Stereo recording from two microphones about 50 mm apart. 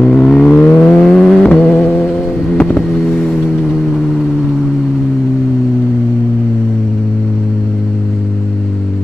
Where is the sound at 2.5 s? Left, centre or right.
Centre.